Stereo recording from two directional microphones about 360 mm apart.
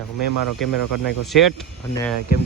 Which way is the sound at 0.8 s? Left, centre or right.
Right.